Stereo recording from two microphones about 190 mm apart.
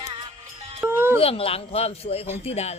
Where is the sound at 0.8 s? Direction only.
10° right (ahead or behind).